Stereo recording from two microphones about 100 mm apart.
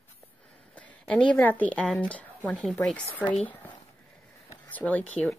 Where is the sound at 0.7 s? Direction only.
15° left (ahead or behind).